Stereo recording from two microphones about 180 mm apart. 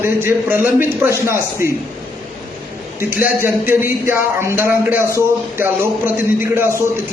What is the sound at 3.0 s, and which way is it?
A man's voice, 10° right (ahead or behind).